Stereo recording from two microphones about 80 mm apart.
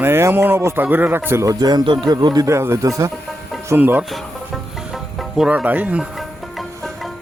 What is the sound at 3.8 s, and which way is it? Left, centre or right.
Speech, right.